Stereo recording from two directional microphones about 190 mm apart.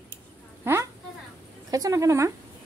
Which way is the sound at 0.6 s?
15° right (ahead or behind).